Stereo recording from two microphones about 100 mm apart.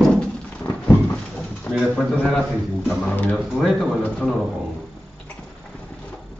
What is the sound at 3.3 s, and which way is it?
Speech, centre (ahead or behind).